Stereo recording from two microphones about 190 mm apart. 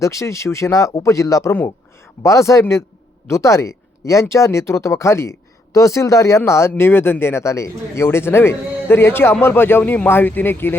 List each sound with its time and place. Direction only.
0.0 s speech: 15° left (ahead or behind)